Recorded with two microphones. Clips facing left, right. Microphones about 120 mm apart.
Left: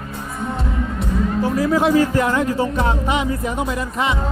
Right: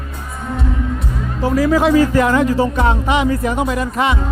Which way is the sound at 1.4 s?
90° right.